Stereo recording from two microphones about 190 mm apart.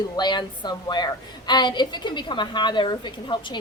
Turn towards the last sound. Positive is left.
turn(degrees=25)  # may be behind; listen again after turning